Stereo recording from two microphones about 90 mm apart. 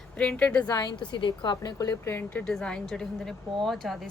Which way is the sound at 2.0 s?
25° left (ahead or behind).